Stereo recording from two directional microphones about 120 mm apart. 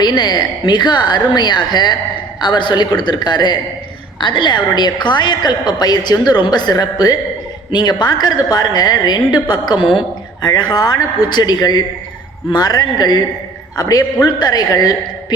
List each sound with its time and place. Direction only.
0.0 s a woman's voice: 35° left (ahead or behind)